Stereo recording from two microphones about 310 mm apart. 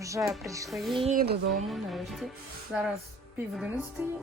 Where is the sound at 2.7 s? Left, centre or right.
Centre.